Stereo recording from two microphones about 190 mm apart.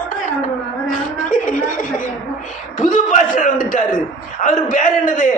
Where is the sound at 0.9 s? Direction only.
45° left (ahead or behind).